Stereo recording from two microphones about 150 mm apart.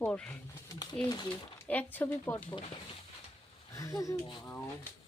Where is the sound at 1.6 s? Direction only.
10° left (ahead or behind).